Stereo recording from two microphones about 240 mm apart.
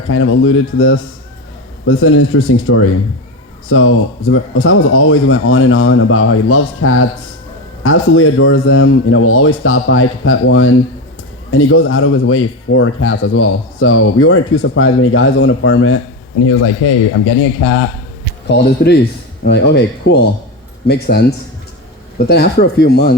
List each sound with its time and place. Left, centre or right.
0.1 s a man's voice: left
18.4 s speech: left